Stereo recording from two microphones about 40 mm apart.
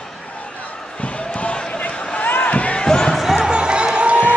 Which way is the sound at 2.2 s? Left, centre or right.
Left.